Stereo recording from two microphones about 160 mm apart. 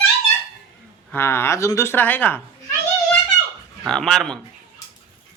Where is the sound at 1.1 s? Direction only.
15° left (ahead or behind).